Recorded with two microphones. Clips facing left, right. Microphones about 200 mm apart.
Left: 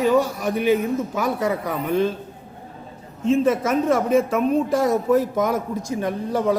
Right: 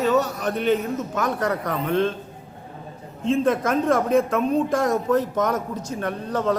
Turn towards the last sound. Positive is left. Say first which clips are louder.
# left 2 dB
turn(degrees=10)  # may be behind; listen again after turning